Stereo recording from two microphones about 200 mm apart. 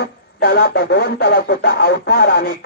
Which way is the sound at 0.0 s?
55° left (ahead or behind).